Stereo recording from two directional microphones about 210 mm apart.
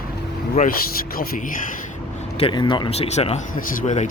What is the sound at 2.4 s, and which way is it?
Speech, 25° left (ahead or behind).